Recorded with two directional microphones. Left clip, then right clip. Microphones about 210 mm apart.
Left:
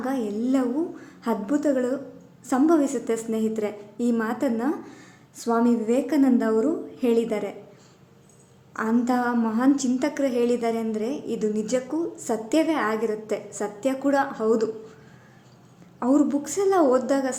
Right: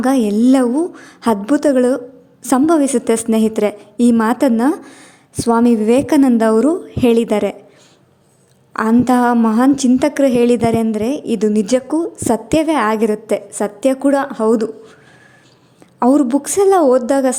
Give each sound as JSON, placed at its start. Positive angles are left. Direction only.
{"t": 0.0, "sound": "a woman's voice", "side_deg": -50}
{"t": 8.7, "sound": "a woman's voice", "side_deg": -45}
{"t": 16.0, "sound": "a woman's voice", "side_deg": -40}